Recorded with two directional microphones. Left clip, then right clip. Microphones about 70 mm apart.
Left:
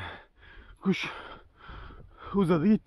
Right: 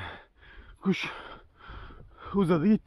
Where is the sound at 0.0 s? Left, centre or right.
Right.